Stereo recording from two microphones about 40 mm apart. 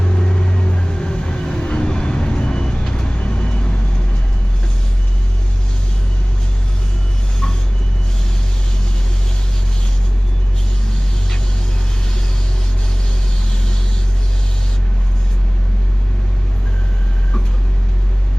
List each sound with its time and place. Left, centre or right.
0.0 s vehicle: left